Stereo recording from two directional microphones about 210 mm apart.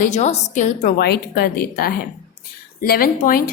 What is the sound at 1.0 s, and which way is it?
A woman's voice, 50° left (ahead or behind).